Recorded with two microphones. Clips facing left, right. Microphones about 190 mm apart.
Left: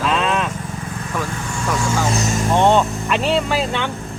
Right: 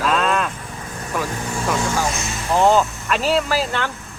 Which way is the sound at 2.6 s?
Centre (ahead or behind).